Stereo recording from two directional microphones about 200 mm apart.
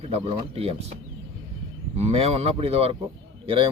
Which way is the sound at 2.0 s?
30° right (ahead or behind).